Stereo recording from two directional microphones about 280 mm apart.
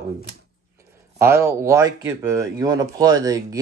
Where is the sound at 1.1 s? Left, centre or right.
Centre.